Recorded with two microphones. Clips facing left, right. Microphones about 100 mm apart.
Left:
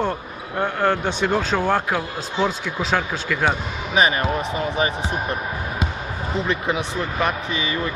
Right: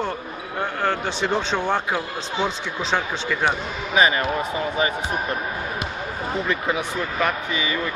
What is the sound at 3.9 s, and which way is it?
Speech, 25° left (ahead or behind).